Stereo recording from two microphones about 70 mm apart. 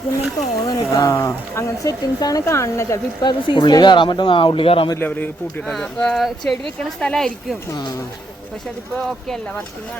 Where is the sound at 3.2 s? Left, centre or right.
Left.